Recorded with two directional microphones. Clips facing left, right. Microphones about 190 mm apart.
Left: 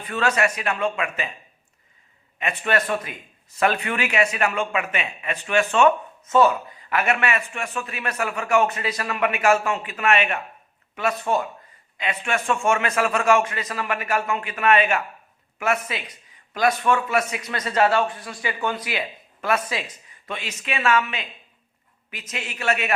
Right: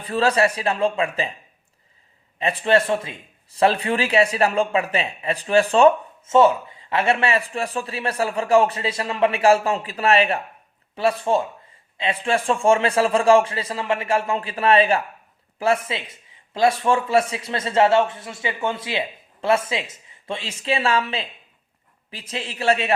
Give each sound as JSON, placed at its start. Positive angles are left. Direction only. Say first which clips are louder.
{"t": 0.0, "sound": "a man's voice", "louder": "right 4 dB", "side_deg": -30}
{"t": 2.4, "sound": "a man's voice", "louder": "right 5 dB", "side_deg": -30}